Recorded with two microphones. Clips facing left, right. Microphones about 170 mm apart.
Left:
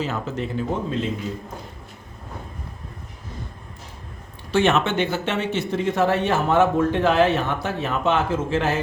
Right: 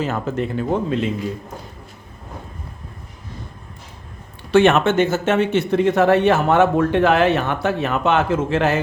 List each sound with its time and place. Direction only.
0.0 s speech: 50° right (ahead or behind)
4.5 s speech: 55° right (ahead or behind)